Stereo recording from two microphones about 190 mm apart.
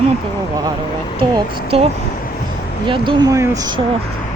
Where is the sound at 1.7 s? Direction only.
35° right (ahead or behind).